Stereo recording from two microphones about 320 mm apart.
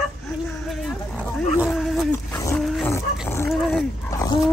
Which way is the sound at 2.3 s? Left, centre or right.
Centre.